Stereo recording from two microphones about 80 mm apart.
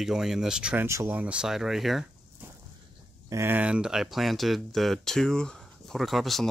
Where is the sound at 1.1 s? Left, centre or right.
Centre.